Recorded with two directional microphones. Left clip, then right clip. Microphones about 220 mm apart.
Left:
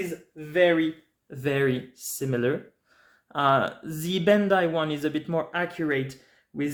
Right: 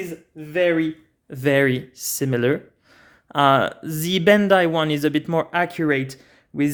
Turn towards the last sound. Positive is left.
turn(degrees=-45)  # may be behind; listen again after turning